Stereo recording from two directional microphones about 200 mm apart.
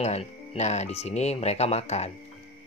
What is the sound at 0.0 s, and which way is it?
Speech, 30° left (ahead or behind).